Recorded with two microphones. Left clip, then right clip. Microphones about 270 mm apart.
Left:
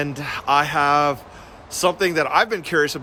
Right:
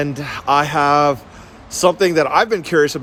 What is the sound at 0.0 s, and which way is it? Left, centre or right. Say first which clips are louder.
Speech: right 3 dB; centre.